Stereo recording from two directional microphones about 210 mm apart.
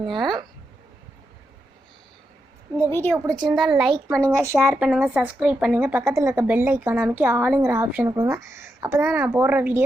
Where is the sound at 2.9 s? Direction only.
10° left (ahead or behind).